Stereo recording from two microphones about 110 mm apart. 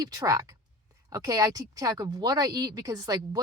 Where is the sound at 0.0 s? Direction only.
35° right (ahead or behind).